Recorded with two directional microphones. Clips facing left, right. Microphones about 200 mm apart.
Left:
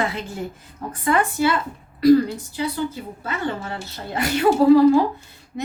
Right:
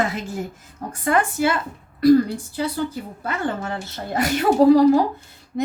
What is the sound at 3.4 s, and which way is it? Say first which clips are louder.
Speech: right 1 dB; 50° right (ahead or behind).